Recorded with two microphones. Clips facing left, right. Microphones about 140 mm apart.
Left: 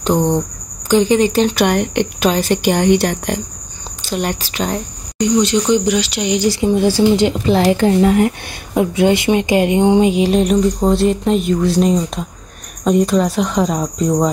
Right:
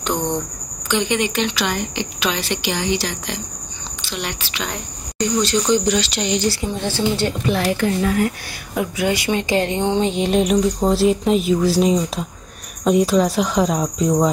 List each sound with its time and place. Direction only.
0.0 s a woman's voice: 35° left (ahead or behind); by 3.3 s 55° left (ahead or behind)
4.0 s a woman's voice: 45° left (ahead or behind)
5.2 s speech: 20° left (ahead or behind)
7.4 s speech: 30° left (ahead or behind); by 14.3 s centre (ahead or behind)